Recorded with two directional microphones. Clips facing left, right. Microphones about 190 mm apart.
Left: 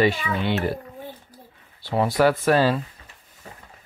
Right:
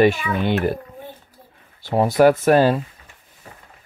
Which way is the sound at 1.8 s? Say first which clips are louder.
Right 5 dB; 45° right (ahead or behind).